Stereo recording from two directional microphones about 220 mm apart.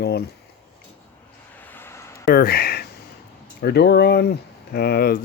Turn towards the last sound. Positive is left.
turn(degrees=45)  # may be behind; listen again after turning